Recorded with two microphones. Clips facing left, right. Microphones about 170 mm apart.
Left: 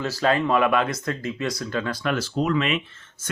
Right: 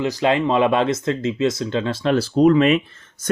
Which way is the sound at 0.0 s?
20° right (ahead or behind).